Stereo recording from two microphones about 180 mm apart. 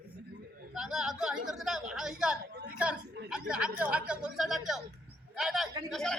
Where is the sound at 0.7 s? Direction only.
Centre (ahead or behind).